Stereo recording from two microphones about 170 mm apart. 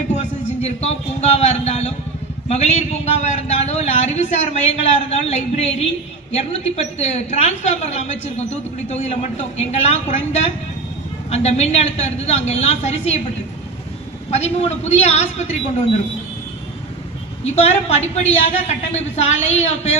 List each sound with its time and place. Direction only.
0.2 s a man's voice: 40° left (ahead or behind)
14.3 s a woman's voice: 40° left (ahead or behind)
17.4 s a woman's voice: 40° left (ahead or behind)